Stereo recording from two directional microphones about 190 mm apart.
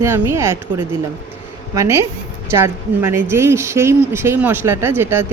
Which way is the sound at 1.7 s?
15° right (ahead or behind).